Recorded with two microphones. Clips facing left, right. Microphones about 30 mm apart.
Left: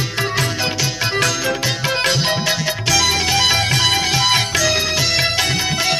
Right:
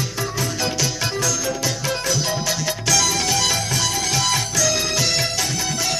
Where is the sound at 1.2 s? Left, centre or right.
Left.